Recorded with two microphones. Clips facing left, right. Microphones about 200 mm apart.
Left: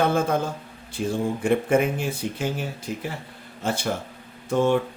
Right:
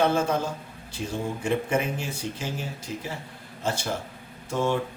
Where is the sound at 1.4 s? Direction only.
55° left (ahead or behind).